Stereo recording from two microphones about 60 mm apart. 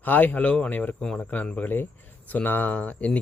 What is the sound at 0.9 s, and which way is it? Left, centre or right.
Speech, centre.